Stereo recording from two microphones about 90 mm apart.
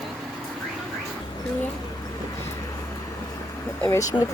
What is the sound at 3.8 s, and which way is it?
Speech, 30° left (ahead or behind).